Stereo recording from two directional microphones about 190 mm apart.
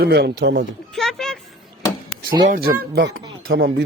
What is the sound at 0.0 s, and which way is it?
Speech, 60° right (ahead or behind).